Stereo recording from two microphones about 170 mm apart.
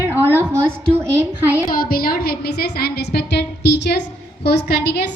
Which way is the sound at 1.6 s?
60° left (ahead or behind).